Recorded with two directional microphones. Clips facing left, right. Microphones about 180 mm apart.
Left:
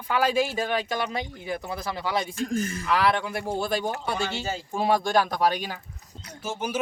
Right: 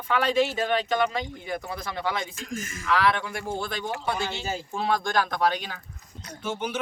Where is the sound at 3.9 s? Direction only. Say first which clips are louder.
Even; 35° left (ahead or behind).